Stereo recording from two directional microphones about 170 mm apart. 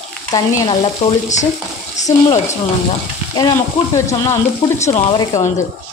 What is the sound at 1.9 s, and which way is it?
Speech, 45° left (ahead or behind).